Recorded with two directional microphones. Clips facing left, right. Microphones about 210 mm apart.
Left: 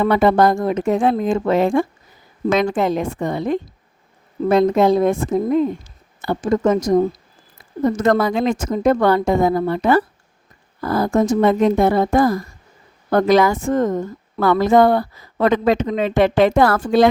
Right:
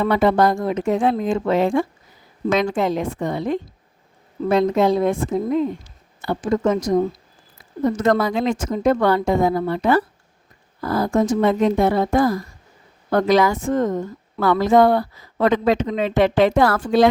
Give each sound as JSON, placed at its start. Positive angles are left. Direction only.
{"t": 0.0, "sound": "speech", "side_deg": 50}